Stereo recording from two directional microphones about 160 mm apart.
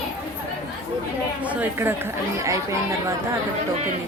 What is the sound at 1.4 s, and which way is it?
Speech, 10° right (ahead or behind).